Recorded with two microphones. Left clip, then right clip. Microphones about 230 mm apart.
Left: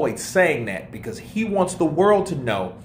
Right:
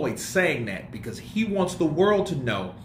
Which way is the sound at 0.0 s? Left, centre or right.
Centre.